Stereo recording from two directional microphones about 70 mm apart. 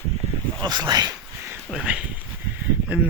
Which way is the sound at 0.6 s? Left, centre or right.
Right.